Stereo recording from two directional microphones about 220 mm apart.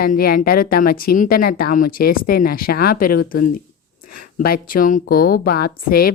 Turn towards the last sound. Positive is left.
turn(degrees=40)  # may be behind; listen again after turning